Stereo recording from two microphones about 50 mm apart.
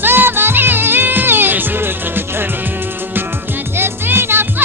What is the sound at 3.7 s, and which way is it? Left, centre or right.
Music, right.